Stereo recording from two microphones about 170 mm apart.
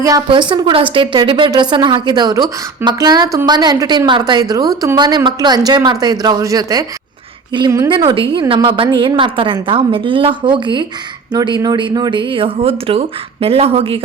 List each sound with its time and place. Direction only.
0.0 s a woman's voice: 25° right (ahead or behind)